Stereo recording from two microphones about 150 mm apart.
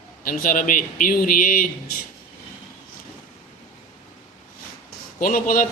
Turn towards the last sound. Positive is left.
turn(degrees=65)  # may be behind; listen again after turning